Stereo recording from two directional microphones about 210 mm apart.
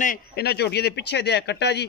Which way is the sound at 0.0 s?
45° left (ahead or behind).